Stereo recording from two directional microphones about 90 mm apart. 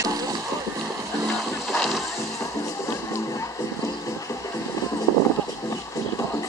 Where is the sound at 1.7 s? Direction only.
Centre (ahead or behind).